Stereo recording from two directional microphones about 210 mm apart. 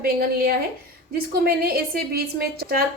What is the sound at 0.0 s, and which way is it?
A woman's voice, 45° right (ahead or behind).